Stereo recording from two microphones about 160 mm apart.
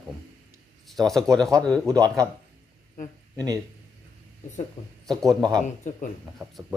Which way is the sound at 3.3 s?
25° right (ahead or behind).